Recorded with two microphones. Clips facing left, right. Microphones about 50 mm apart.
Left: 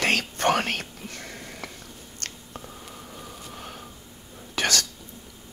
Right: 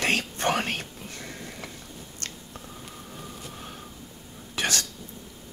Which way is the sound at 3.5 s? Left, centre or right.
Left.